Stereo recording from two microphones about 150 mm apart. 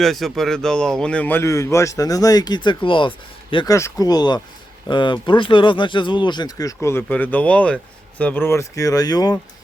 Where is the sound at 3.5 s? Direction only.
25° left (ahead or behind).